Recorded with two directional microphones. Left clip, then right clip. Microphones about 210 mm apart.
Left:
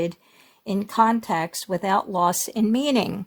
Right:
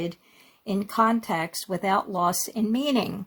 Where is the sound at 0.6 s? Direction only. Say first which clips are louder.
Left 3 dB; 30° left (ahead or behind).